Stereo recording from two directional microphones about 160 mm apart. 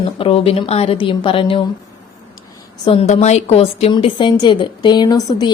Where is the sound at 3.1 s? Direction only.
45° left (ahead or behind).